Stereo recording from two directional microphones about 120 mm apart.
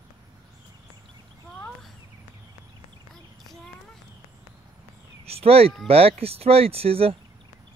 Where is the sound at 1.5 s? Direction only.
5° left (ahead or behind).